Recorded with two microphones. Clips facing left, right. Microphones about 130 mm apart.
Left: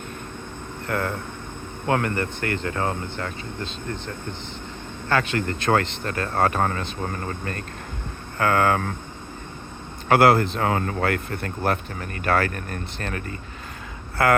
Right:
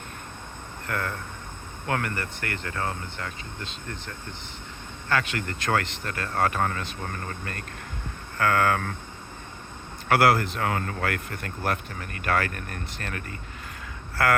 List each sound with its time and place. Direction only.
0.9 s speech: 25° left (ahead or behind)
3.2 s speech: 45° left (ahead or behind)
5.0 s speech: 30° left (ahead or behind)
8.4 s speech: 25° left (ahead or behind)
10.1 s speech: 25° left (ahead or behind)